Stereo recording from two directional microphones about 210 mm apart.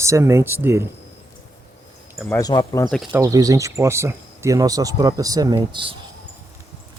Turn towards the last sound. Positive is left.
turn(degrees=-25)  # may be behind; listen again after turning